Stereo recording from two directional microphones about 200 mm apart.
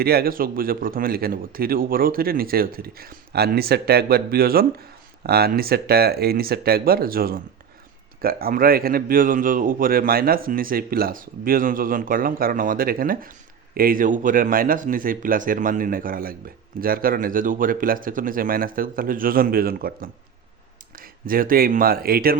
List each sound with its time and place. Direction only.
0.0 s a man's voice: 50° right (ahead or behind)